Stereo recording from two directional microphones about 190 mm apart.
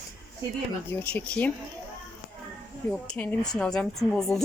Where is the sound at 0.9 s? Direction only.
10° left (ahead or behind).